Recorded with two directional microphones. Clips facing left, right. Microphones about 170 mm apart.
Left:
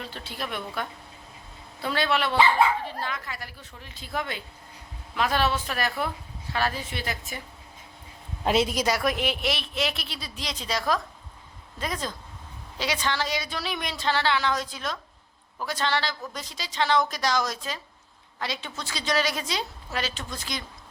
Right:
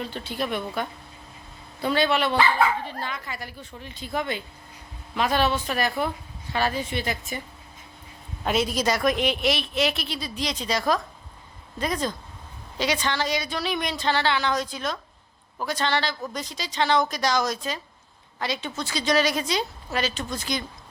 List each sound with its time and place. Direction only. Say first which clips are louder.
0.0 s speech: right 6 dB; centre (ahead or behind)
1.8 s speech: right 3 dB; centre (ahead or behind)
8.4 s a woman's voice: left 1 dB; 25° left (ahead or behind)
8.7 s speech: right 2 dB; 10° left (ahead or behind)